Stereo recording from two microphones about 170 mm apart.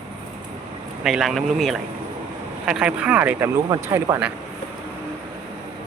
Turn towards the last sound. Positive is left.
turn(degrees=-20)  # may be behind; listen again after turning